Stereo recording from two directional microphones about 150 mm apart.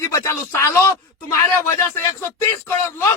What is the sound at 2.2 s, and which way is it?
Speech, 15° left (ahead or behind).